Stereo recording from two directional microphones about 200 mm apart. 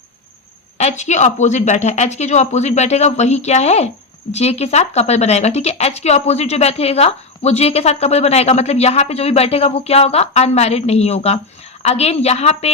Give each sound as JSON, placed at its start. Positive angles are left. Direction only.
{"t": 0.8, "sound": "speech", "side_deg": 35}